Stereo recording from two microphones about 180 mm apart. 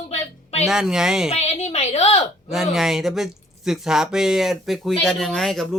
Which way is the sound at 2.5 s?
Centre (ahead or behind).